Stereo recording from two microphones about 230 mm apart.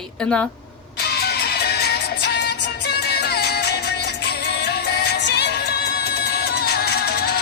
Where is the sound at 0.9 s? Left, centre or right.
Left.